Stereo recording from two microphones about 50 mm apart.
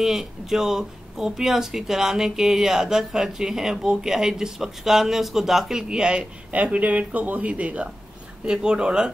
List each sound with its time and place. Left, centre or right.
0.0 s speech: centre
6.5 s speech: right